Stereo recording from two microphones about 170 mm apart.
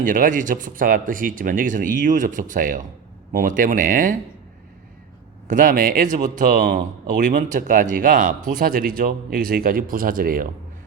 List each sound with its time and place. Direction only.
0.0 s speech: 50° right (ahead or behind)
5.5 s speech: 50° right (ahead or behind)